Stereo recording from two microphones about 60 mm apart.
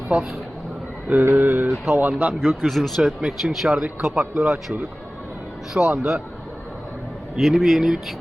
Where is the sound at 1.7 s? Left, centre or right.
Centre.